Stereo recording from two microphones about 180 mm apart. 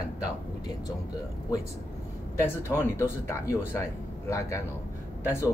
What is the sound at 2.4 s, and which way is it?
Speech, 15° left (ahead or behind).